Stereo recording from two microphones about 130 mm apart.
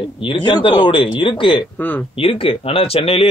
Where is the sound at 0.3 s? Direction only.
40° left (ahead or behind).